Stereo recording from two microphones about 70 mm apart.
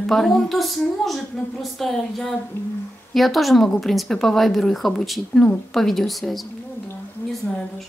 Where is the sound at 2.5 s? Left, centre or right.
Left.